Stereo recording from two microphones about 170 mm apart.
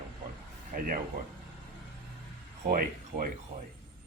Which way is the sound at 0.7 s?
55° right (ahead or behind).